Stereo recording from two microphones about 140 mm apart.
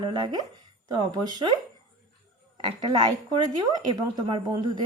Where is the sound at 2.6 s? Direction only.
35° right (ahead or behind).